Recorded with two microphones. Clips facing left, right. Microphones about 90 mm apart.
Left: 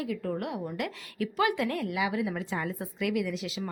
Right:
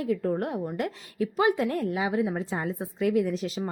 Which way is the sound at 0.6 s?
30° right (ahead or behind).